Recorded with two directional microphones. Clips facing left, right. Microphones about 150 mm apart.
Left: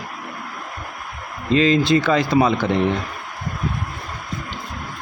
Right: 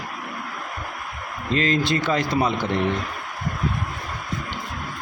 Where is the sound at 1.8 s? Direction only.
90° left.